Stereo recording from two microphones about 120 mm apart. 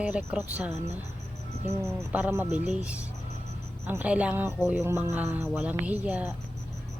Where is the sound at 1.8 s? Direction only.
15° right (ahead or behind).